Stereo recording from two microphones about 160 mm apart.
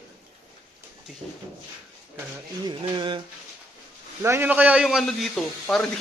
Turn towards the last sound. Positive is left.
turn(degrees=5)  # may be behind; listen again after turning